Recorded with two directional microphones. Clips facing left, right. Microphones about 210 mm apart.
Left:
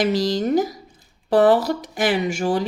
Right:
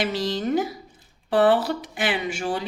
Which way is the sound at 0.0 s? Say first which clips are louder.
Left 5 dB; 40° left (ahead or behind).